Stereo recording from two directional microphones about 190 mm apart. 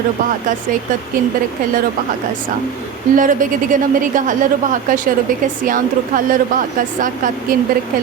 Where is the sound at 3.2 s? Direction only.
45° right (ahead or behind).